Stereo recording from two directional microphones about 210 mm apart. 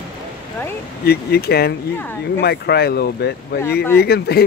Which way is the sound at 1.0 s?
50° left (ahead or behind).